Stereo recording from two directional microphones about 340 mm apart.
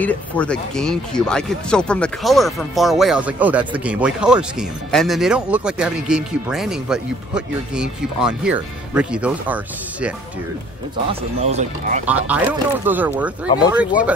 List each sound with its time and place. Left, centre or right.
0.0 s speech: centre
11.1 s speech: centre
12.1 s speech: centre